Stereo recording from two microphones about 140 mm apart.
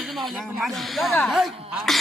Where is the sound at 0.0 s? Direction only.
Centre (ahead or behind).